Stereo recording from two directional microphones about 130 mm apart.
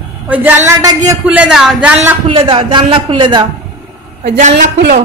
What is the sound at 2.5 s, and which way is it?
Speech, 40° right (ahead or behind).